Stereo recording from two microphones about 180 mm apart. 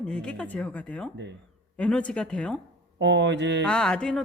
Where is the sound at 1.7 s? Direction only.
5° left (ahead or behind).